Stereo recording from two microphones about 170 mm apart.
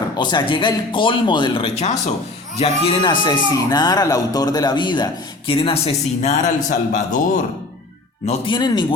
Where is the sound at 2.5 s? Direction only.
30° left (ahead or behind); by 7.4 s 50° left (ahead or behind).